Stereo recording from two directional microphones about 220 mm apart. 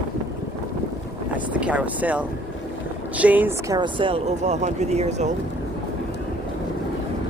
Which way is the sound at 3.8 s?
25° right (ahead or behind).